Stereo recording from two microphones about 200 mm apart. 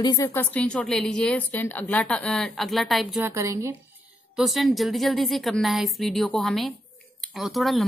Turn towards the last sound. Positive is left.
turn(degrees=0)  # may be behind; listen again after turning